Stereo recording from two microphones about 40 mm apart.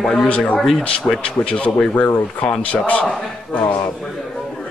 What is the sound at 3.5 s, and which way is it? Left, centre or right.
Speech, left.